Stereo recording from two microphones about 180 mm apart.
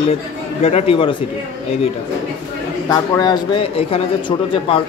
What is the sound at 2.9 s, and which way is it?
Speech, 20° left (ahead or behind).